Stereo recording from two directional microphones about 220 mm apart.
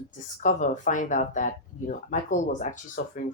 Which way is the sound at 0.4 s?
35° left (ahead or behind).